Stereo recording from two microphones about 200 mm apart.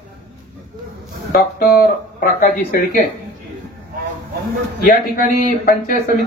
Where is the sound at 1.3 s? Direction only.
45° left (ahead or behind).